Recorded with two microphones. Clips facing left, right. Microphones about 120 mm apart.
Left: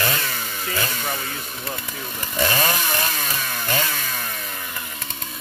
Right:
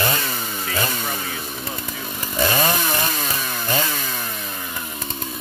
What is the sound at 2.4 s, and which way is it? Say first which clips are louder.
Chainsaw: right 2 dB; 15° right (ahead or behind).